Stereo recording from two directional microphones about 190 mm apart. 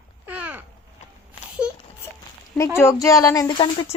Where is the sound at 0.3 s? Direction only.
10° right (ahead or behind).